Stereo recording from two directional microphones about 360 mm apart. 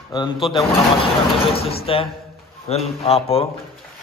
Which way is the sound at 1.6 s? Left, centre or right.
Centre.